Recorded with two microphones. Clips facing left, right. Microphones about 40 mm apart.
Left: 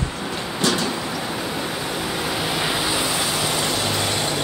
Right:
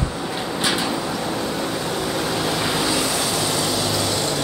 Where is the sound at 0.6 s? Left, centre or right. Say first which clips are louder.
Left 1 dB; centre.